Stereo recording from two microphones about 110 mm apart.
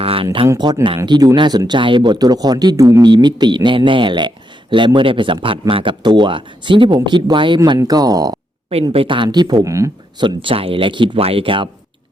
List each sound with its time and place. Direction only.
0.0 s a sound: 60° right (ahead or behind)
0.6 s speech: 40° right (ahead or behind)
2.1 s speech: 35° right (ahead or behind)
3.0 s speech: 40° right (ahead or behind)
7.8 s speech: 35° right (ahead or behind)
8.9 s speech: 55° right (ahead or behind)
9.6 s speech: 30° right (ahead or behind)
10.2 s speech: 50° right (ahead or behind)
11.2 s speech: 60° right (ahead or behind)